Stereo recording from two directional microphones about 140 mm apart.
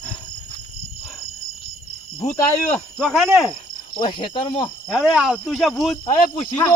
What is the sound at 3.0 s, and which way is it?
Speech, centre (ahead or behind).